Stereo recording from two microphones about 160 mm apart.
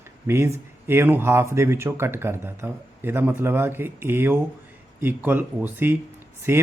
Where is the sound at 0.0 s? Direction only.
15° right (ahead or behind).